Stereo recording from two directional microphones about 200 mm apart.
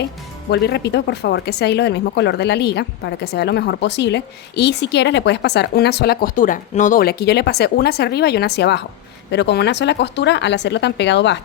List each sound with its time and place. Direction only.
0.5 s speech: 55° left (ahead or behind)